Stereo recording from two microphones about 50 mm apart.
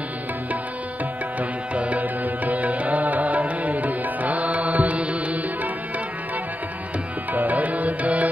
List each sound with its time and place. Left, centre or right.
1.8 s music: right
7.3 s music: right